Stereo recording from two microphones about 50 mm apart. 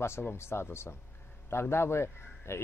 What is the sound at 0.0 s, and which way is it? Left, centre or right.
Speech, left.